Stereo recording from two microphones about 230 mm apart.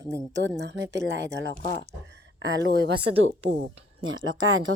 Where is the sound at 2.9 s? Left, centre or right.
Right.